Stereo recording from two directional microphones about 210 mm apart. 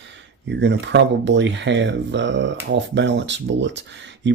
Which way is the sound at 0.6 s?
55° right (ahead or behind).